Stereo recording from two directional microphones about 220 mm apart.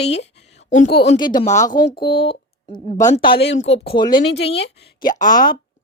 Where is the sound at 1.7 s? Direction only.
45° left (ahead or behind).